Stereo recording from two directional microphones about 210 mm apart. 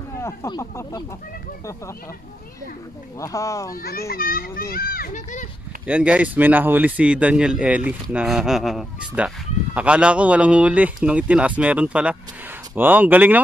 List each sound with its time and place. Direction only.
0.2 s speech: 15° left (ahead or behind)
3.2 s speech: 15° left (ahead or behind)
3.7 s a child's voice: 45° left (ahead or behind)
5.9 s speech: 5° right (ahead or behind)